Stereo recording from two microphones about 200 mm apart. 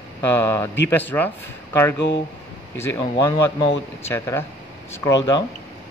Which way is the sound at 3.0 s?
25° left (ahead or behind).